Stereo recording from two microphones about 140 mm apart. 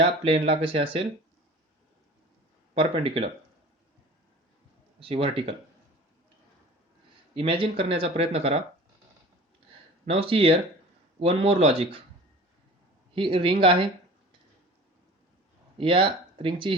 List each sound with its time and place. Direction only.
0.0 s speech: 45° right (ahead or behind)
2.7 s speech: 40° right (ahead or behind)
4.9 s speech: 40° right (ahead or behind)
7.3 s speech: 40° right (ahead or behind)
10.1 s speech: 45° right (ahead or behind)
13.1 s speech: 40° right (ahead or behind)
15.8 s speech: 40° right (ahead or behind)